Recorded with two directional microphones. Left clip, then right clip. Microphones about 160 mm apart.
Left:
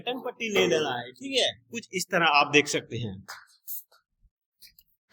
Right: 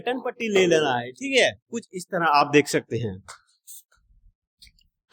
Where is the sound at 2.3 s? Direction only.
60° right (ahead or behind).